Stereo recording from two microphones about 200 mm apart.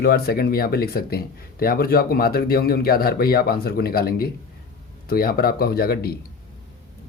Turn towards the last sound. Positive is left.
turn(degrees=50)  # may be behind; listen again after turning